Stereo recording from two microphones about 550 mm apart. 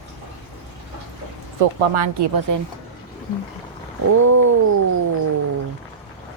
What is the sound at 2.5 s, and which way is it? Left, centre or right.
Speech, right.